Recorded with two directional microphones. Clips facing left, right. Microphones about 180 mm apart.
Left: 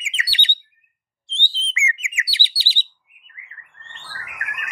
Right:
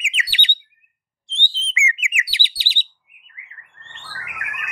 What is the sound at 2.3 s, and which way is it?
Chirp, 15° right (ahead or behind).